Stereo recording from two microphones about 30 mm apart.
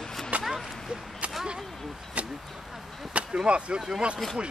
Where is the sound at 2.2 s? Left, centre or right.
Right.